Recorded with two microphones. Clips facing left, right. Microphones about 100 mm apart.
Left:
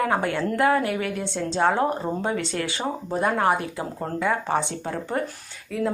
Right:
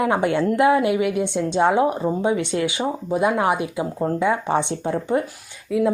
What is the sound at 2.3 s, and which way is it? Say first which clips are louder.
Speech: right 5 dB; 20° right (ahead or behind).